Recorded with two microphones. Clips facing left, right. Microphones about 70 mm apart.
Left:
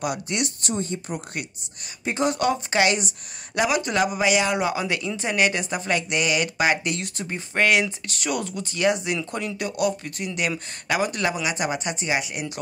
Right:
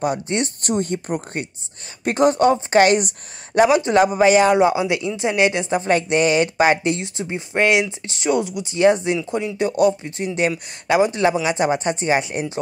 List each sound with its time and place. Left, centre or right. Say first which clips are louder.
0.0 s a man's voice: right 5 dB; right
0.6 s speech: right 6 dB; right
2.0 s speech: right 7 dB; right
2.3 s a man's voice: right 7 dB; right
3.5 s a man's voice: right 8 dB; right
4.6 s speech: right 8 dB; right
8.7 s speech: right 7 dB; right
9.2 s speech: right 6 dB; centre
9.6 s a man's voice: right 8 dB; right